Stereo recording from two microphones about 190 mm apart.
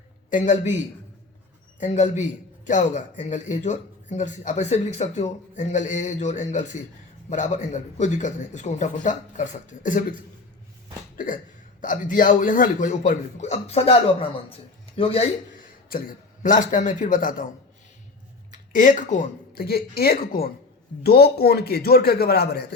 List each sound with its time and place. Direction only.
0.3 s a man's voice: 40° left (ahead or behind)
11.8 s a man's voice: 45° left (ahead or behind)
15.9 s a man's voice: 50° left (ahead or behind)
18.5 s a man's voice: 45° left (ahead or behind)